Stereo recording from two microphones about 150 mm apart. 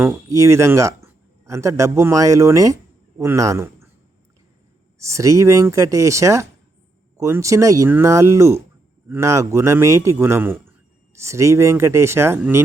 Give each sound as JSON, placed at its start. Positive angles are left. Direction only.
{"t": 0.0, "sound": "a man's voice", "side_deg": -15}
{"t": 4.9, "sound": "a man's voice", "side_deg": -20}